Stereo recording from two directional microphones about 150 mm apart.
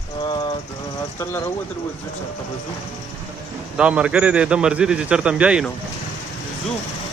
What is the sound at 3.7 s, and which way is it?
A man's voice, 5° right (ahead or behind).